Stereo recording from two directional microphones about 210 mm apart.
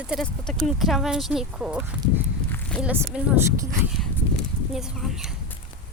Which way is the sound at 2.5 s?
5° left (ahead or behind).